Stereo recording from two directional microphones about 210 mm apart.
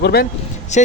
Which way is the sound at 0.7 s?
35° left (ahead or behind).